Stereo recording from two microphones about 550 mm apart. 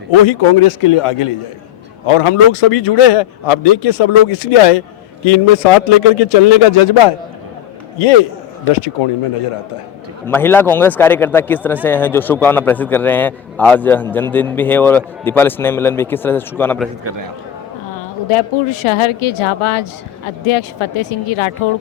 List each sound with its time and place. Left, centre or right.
0.3 s a woman's voice: left
5.2 s a man's voice: left
7.9 s a man's voice: left
8.7 s a man's voice: left
10.2 s speech: centre
17.9 s a woman's voice: left